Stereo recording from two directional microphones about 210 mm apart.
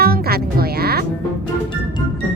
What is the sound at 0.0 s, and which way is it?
Music, 45° right (ahead or behind).